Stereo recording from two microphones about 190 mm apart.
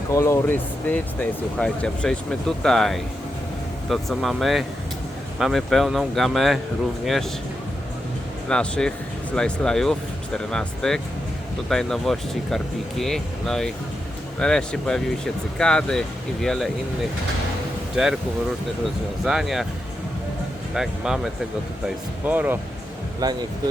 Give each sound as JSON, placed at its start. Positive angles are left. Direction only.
{"t": 0.1, "sound": "speech", "side_deg": 15}
{"t": 8.4, "sound": "speech", "side_deg": 5}
{"t": 17.9, "sound": "speech", "side_deg": -5}
{"t": 19.2, "sound": "speech", "side_deg": 0}
{"t": 20.7, "sound": "speech", "side_deg": 0}
{"t": 23.2, "sound": "speech", "side_deg": -20}